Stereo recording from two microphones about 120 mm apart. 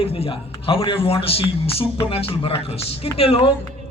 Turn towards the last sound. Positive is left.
turn(degrees=45)  # may be behind; listen again after turning